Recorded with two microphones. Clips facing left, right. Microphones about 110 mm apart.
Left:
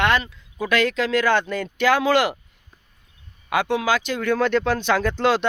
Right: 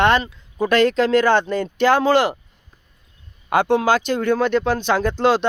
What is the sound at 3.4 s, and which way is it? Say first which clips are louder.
Speech: right 4 dB; 35° right (ahead or behind).